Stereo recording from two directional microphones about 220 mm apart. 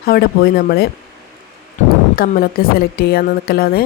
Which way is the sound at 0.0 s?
45° left (ahead or behind).